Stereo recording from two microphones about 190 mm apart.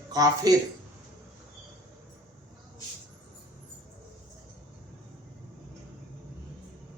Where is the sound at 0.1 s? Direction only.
20° right (ahead or behind).